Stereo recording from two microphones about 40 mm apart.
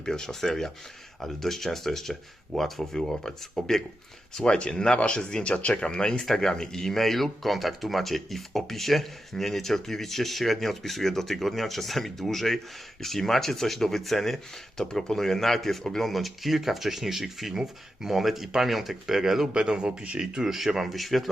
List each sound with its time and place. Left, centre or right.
0.0 s speech: centre
4.4 s speech: left
6.1 s speech: centre
19.5 s speech: right
20.4 s speech: centre